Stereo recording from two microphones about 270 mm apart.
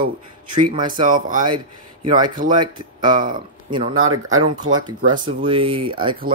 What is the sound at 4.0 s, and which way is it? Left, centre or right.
Speech, right.